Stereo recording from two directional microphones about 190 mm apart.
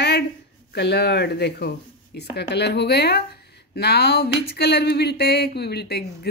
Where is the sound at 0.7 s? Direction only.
60° left (ahead or behind).